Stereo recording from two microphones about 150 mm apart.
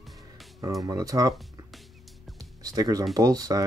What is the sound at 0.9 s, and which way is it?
Speech, 25° right (ahead or behind).